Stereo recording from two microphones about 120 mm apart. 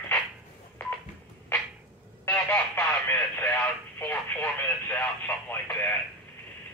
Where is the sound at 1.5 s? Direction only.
15° left (ahead or behind).